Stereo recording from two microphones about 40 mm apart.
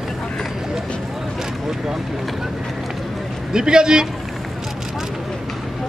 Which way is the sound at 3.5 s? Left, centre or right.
Centre.